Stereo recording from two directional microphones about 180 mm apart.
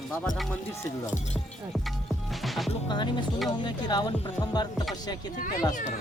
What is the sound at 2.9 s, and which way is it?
Speech, 25° left (ahead or behind).